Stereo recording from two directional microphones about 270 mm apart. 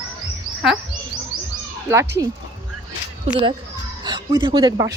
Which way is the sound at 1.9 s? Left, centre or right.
Centre.